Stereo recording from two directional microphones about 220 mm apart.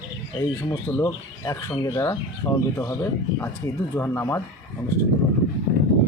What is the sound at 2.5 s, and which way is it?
Speech, 15° left (ahead or behind).